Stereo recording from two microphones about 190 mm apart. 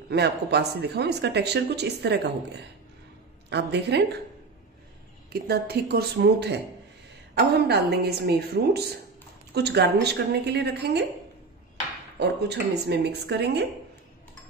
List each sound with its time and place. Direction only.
0.1 s speech: 60° right (ahead or behind)
5.3 s speech: 55° right (ahead or behind)
12.2 s speech: 60° right (ahead or behind)